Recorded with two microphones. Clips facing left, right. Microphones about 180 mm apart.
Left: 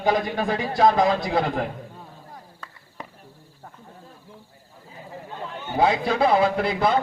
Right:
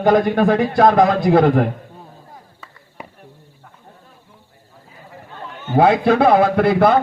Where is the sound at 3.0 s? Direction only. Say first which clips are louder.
Right 2 dB; 10° right (ahead or behind).